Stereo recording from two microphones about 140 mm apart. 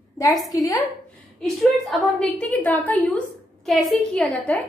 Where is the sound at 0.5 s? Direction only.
25° left (ahead or behind).